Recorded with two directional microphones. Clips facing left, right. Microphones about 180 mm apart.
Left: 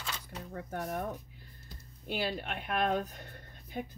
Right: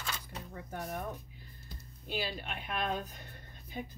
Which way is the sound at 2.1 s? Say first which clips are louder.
Left 3 dB; 60° left (ahead or behind).